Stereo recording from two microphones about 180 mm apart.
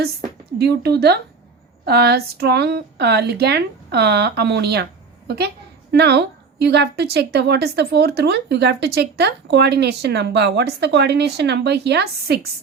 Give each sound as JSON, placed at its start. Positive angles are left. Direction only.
{"t": 0.0, "sound": "speech", "side_deg": -60}
{"t": 5.9, "sound": "speech", "side_deg": -65}